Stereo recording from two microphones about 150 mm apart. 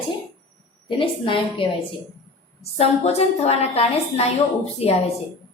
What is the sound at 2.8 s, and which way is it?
A woman's voice, 45° left (ahead or behind).